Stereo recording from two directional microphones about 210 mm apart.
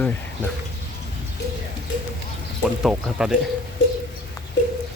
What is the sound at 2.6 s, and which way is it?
Speech, centre (ahead or behind).